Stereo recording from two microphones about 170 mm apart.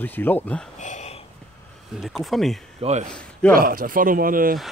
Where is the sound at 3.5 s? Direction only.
55° right (ahead or behind).